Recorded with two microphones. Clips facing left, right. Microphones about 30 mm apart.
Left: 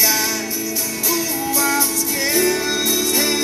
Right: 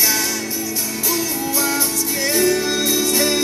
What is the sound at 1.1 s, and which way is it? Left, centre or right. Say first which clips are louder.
Music: left 1 dB; centre.